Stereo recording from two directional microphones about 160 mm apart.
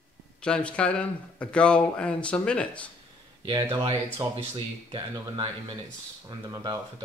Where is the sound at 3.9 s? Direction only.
25° right (ahead or behind).